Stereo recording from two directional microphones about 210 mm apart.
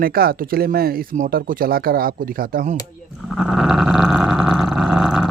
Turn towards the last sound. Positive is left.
turn(degrees=0)  # may be behind; listen again after turning